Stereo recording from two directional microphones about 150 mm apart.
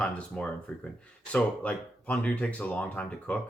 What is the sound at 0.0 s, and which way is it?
Speech, 10° left (ahead or behind).